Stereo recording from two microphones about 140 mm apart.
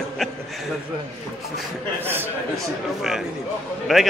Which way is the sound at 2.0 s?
15° right (ahead or behind).